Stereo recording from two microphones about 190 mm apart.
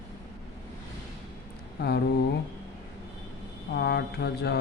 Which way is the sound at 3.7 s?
55° left (ahead or behind).